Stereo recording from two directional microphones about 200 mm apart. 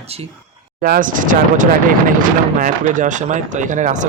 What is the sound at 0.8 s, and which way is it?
Speech, 45° right (ahead or behind).